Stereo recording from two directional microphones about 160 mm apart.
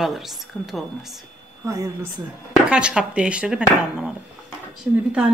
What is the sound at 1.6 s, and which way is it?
Speech, 20° right (ahead or behind).